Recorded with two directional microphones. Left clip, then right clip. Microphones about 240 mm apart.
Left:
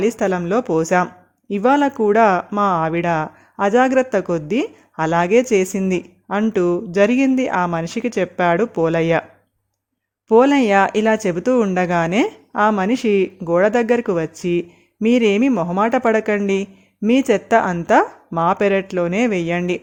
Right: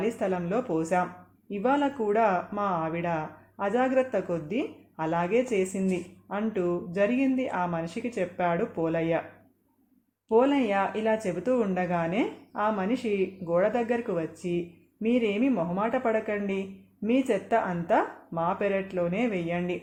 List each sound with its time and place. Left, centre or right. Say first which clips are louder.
0.0 s speech: left 10 dB; left
10.2 s speech: left 10 dB; left